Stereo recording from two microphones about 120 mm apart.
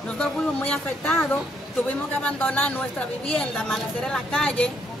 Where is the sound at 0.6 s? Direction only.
15° left (ahead or behind).